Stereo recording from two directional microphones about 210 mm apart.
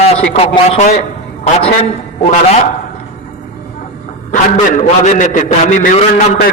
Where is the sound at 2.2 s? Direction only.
35° left (ahead or behind).